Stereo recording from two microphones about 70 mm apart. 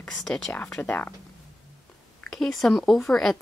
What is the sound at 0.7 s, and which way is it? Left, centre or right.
Speech, left.